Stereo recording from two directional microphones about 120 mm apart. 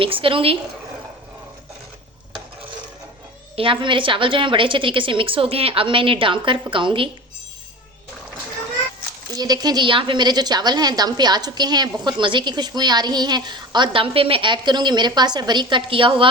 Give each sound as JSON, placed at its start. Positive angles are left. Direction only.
{"t": 0.0, "sound": "a woman's voice", "side_deg": -50}
{"t": 3.5, "sound": "a woman's voice", "side_deg": -45}
{"t": 9.3, "sound": "a woman's voice", "side_deg": -35}